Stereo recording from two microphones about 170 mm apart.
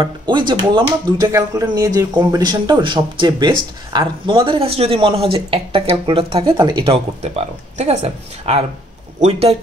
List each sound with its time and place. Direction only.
0.0 s speech: 25° right (ahead or behind)